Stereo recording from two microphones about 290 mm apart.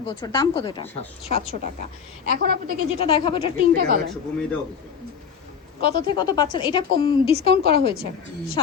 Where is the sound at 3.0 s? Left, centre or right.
Centre.